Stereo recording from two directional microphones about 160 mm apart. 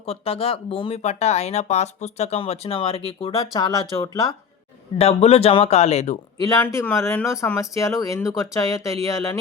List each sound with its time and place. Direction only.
0.0 s speech: 40° left (ahead or behind)
4.9 s speech: 40° left (ahead or behind)
6.4 s speech: 20° left (ahead or behind)